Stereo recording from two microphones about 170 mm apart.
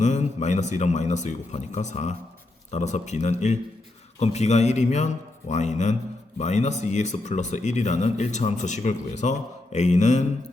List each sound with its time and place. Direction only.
0.0 s speech: 40° left (ahead or behind)